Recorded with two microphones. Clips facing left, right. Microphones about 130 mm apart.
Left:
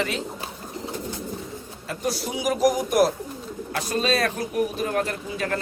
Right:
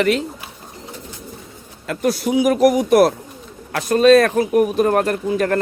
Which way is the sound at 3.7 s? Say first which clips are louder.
Right 12 dB; 60° right (ahead or behind).